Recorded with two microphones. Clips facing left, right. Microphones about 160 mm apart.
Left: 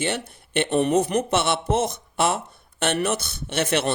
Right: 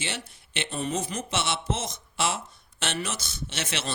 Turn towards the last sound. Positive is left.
turn(degrees=55)  # may be behind; listen again after turning